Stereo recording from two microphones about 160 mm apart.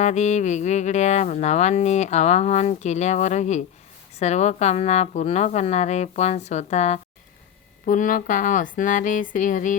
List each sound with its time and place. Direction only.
0.0 s speech: 45° left (ahead or behind)
7.9 s speech: 55° left (ahead or behind)